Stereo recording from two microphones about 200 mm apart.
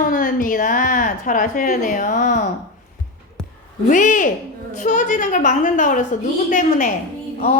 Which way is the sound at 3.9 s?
40° left (ahead or behind).